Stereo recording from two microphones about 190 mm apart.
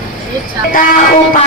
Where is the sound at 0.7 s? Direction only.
45° left (ahead or behind).